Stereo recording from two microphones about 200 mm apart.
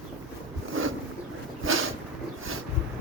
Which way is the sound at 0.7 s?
90° right.